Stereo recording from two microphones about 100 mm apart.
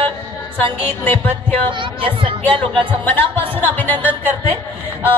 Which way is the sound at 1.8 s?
60° right (ahead or behind).